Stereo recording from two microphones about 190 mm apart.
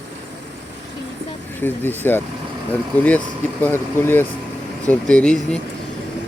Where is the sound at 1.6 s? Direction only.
10° left (ahead or behind).